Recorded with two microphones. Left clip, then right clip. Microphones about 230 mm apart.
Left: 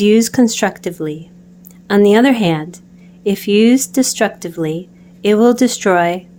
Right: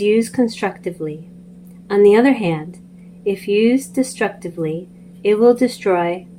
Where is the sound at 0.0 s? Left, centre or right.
Left.